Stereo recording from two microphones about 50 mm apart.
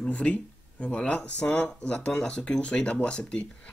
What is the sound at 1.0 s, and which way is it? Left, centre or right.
Speech, centre.